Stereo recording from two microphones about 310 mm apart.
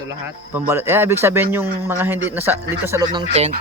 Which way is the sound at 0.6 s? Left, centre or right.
Centre.